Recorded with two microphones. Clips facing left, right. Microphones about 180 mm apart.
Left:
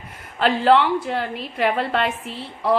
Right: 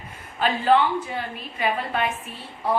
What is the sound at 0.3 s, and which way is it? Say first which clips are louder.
A woman's voice: left 3 dB; 75° left (ahead or behind).